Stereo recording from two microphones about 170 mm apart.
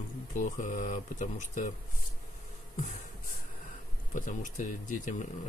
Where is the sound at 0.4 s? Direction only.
45° left (ahead or behind).